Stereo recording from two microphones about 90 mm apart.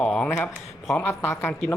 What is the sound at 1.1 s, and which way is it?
Speech, 25° left (ahead or behind).